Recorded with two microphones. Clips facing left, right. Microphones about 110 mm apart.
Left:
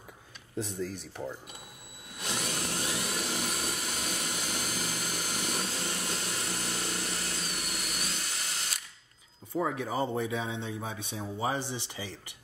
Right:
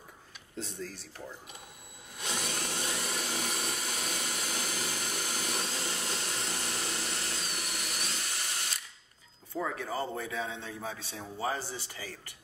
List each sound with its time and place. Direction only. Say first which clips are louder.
0.6 s speech: left 6 dB; 15° left (ahead or behind)
2.1 s tools: left 1 dB; centre (ahead or behind)
9.6 s a man's voice: left 3 dB; 15° left (ahead or behind)